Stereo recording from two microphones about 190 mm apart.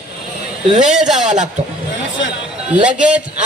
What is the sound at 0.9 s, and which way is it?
Speech, 5° right (ahead or behind).